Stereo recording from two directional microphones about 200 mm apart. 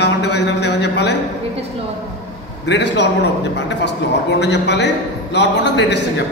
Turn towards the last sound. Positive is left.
turn(degrees=60)  # may be behind; listen again after turning